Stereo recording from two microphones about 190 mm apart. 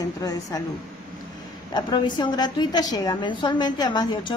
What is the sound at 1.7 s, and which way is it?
A woman's voice, 20° left (ahead or behind).